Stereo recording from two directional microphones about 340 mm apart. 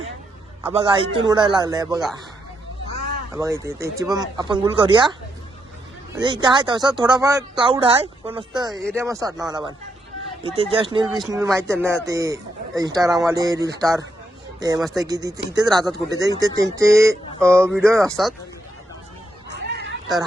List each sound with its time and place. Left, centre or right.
0.7 s speech: centre
3.3 s speech: centre
6.1 s speech: centre
19.5 s a sound: right